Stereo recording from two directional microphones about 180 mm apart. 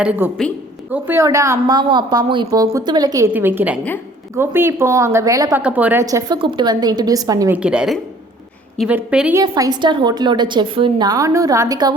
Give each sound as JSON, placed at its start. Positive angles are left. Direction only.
{"t": 0.0, "sound": "a woman's voice", "side_deg": -5}
{"t": 3.3, "sound": "a woman's voice", "side_deg": -10}
{"t": 9.4, "sound": "a woman's voice", "side_deg": -20}